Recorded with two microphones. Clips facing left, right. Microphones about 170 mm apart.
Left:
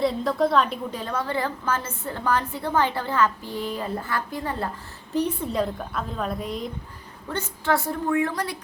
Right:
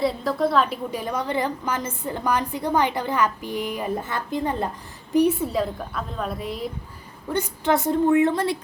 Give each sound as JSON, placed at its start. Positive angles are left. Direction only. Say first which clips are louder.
{"t": 0.0, "sound": "a woman's voice", "louder": "even", "side_deg": 0}
{"t": 5.1, "sound": "a woman's voice", "louder": "right 5 dB", "side_deg": -10}
{"t": 7.3, "sound": "a woman's voice", "louder": "right 3 dB", "side_deg": -15}